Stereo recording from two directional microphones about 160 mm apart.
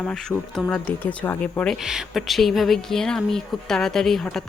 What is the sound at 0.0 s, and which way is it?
Speech, 5° left (ahead or behind).